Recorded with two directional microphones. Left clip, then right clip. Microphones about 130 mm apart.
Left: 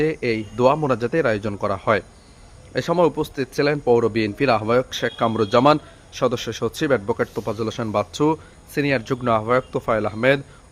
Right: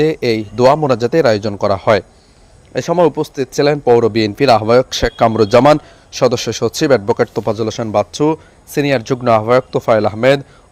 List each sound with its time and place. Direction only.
0.0 s a man's voice: 30° right (ahead or behind)
2.7 s a man's voice: 20° right (ahead or behind)
7.9 s speech: 15° right (ahead or behind)
8.7 s a man's voice: 30° right (ahead or behind)